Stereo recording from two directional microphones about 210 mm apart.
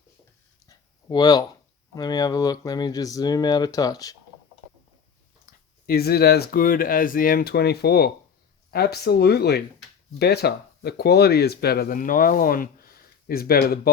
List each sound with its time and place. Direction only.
0.7 s a sound: 15° left (ahead or behind)
2.0 s speech: 15° left (ahead or behind)
5.8 s speech: 45° left (ahead or behind)